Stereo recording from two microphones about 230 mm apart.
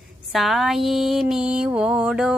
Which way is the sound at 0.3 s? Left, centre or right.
Centre.